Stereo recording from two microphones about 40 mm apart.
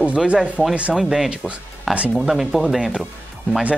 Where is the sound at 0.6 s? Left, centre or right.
Left.